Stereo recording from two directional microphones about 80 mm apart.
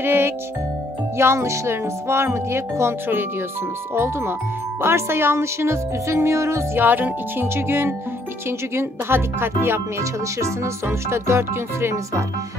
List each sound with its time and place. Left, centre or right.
0.0 s music: right
1.1 s speech: right